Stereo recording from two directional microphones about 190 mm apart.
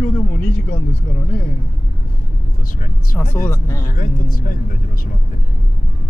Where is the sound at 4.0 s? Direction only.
45° left (ahead or behind).